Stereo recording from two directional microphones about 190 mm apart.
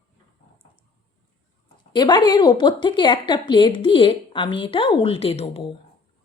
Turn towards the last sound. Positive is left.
turn(degrees=30)  # may be behind; listen again after turning